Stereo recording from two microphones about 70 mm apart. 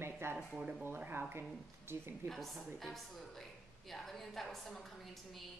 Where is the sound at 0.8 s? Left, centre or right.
Right.